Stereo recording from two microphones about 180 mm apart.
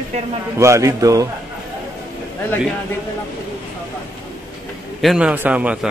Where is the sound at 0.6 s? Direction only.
15° right (ahead or behind).